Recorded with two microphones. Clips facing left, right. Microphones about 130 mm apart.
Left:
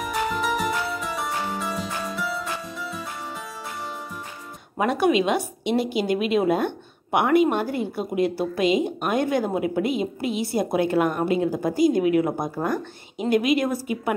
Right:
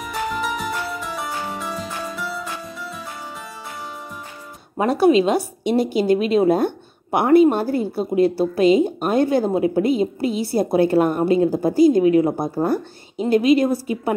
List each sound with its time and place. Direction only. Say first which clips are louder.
0.0 s music: even; centre (ahead or behind)
4.7 s a woman's voice: right 5 dB; 35° right (ahead or behind)